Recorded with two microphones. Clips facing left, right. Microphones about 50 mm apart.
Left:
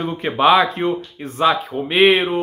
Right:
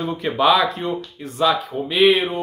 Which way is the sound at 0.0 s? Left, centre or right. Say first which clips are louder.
Left 2 dB; left.